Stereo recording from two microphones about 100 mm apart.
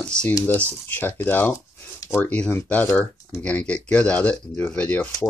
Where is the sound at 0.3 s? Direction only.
35° left (ahead or behind).